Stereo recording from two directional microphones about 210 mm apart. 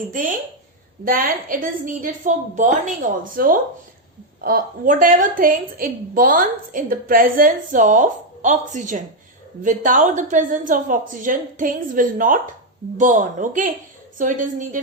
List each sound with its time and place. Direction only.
0.1 s a woman's voice: 40° right (ahead or behind)